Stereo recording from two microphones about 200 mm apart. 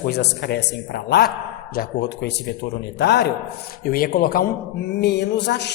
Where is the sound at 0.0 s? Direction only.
55° left (ahead or behind).